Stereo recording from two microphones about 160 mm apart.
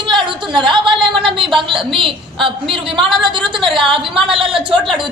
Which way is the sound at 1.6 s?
30° right (ahead or behind).